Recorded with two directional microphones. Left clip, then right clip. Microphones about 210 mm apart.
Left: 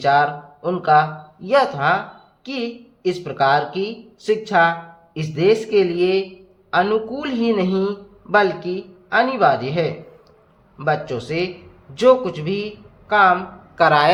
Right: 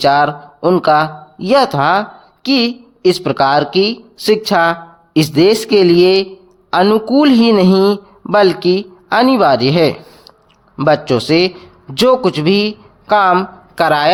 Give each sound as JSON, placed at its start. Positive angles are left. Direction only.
{"t": 0.0, "sound": "speech", "side_deg": -55}
{"t": 13.7, "sound": "speech", "side_deg": -30}